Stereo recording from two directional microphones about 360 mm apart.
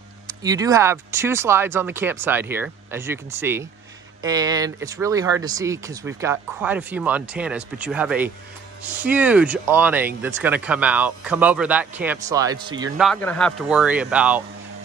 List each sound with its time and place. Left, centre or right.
0.3 s speech: centre